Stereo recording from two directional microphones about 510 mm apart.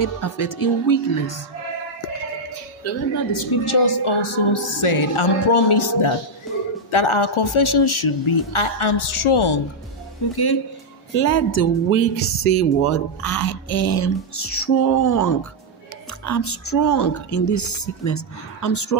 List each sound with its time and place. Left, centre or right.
0.0 s speech: left
3.6 s speech: left
6.5 s a sound: centre
6.9 s speech: left
10.3 s speech: left
11.1 s speech: left